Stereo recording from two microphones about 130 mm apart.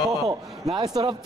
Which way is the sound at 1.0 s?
40° right (ahead or behind).